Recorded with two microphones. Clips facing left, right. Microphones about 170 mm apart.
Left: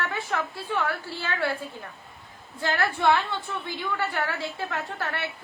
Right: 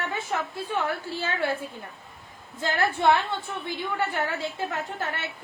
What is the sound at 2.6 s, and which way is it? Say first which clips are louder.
A woman's voice: right 1 dB; 20° right (ahead or behind).